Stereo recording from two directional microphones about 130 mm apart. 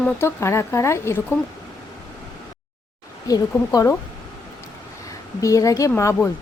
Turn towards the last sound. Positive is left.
turn(degrees=20)  # may be behind; listen again after turning